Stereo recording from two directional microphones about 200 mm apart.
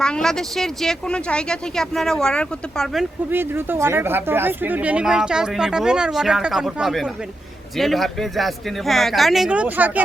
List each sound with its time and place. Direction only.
0.0 s speech: 5° left (ahead or behind)